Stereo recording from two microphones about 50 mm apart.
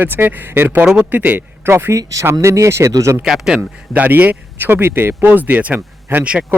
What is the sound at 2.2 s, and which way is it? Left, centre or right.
Speech, right.